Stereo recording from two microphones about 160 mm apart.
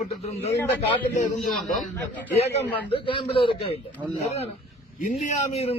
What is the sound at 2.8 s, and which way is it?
Speech, 35° left (ahead or behind).